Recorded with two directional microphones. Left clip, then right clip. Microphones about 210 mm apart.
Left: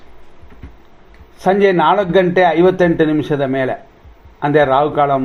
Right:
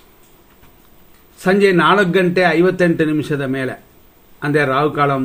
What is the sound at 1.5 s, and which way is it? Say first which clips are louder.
Speech: left 1 dB; 30° right (ahead or behind).